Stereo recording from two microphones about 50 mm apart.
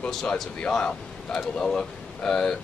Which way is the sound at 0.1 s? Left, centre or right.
Centre.